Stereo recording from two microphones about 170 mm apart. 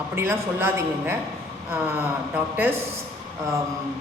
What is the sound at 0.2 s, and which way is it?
Speech, 15° right (ahead or behind).